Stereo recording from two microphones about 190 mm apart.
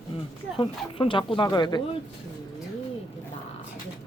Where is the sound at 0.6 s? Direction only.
25° left (ahead or behind).